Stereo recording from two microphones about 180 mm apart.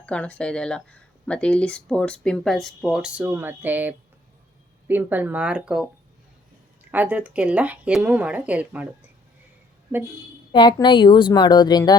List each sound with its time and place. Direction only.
0.0 s speech: 5° left (ahead or behind)
6.9 s speech: 10° right (ahead or behind)
10.5 s a woman's voice: 25° left (ahead or behind)